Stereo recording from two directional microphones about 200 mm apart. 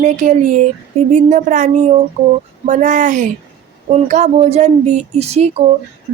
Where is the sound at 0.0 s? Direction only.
40° right (ahead or behind).